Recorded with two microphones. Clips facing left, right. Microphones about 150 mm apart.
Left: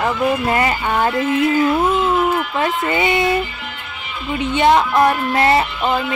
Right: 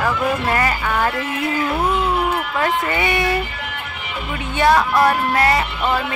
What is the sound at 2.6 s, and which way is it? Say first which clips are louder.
Speech: even; 20° left (ahead or behind).